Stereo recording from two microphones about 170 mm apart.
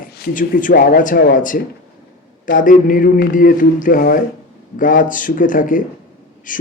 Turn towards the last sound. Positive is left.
turn(degrees=50)  # may be behind; listen again after turning